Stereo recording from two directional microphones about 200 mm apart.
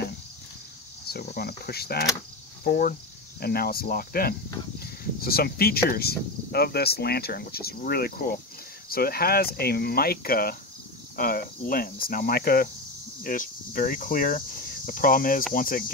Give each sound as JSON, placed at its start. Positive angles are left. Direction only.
{"t": 1.0, "sound": "cricket", "side_deg": 50}
{"t": 13.2, "sound": "speech", "side_deg": 45}
{"t": 15.5, "sound": "cricket", "side_deg": 45}